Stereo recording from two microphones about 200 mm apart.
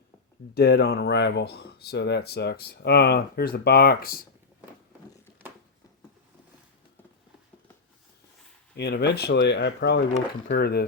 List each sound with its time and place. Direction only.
0.5 s speech: 55° left (ahead or behind)
8.7 s speech: 55° left (ahead or behind)